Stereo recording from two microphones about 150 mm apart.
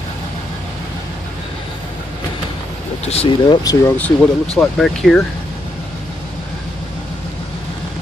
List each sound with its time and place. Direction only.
3.1 s speech: 35° left (ahead or behind)
3.8 s speech: 10° left (ahead or behind)